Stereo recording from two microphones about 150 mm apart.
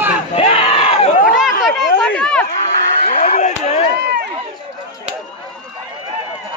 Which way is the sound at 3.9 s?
90° right.